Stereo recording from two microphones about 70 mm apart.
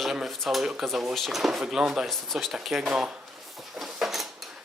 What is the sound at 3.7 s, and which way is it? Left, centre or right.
Dishes, centre.